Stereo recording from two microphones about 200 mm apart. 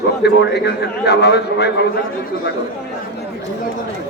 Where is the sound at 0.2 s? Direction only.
55° left (ahead or behind).